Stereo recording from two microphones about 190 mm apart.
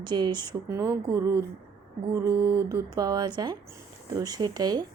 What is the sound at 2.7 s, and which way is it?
A woman's voice, 20° right (ahead or behind).